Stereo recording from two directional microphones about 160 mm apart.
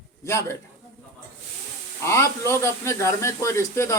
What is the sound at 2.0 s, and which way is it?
Speech, 15° left (ahead or behind).